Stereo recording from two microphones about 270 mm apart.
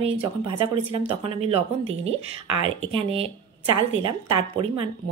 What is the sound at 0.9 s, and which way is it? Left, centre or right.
Speech, centre.